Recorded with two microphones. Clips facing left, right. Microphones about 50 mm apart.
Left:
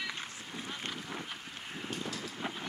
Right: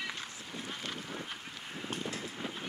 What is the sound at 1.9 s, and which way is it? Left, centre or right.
Vehicle, right.